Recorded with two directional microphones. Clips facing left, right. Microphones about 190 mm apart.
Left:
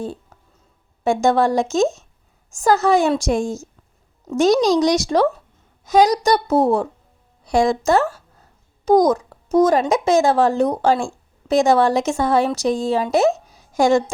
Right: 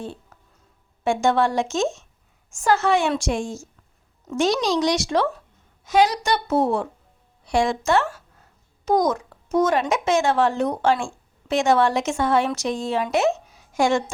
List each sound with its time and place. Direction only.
1.0 s a woman's voice: 40° left (ahead or behind)